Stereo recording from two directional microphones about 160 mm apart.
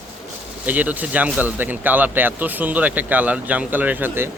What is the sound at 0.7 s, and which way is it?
Speech, 10° right (ahead or behind).